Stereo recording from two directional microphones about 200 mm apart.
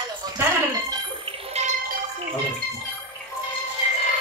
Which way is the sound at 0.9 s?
25° right (ahead or behind).